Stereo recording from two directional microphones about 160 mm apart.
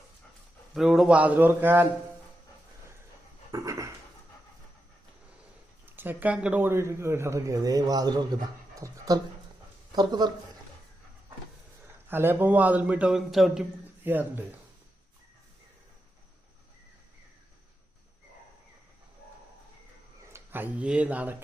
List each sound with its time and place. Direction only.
0.7 s a man's voice: centre (ahead or behind)
3.5 s a sound: 20° right (ahead or behind)
5.8 s speech: 10° right (ahead or behind)
12.0 s a man's voice: 15° right (ahead or behind)
20.3 s speech: 10° right (ahead or behind)